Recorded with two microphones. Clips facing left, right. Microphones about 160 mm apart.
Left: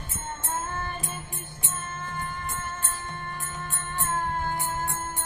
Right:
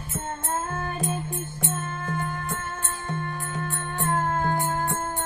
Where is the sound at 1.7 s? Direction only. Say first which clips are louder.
Right 3 dB; 65° right (ahead or behind).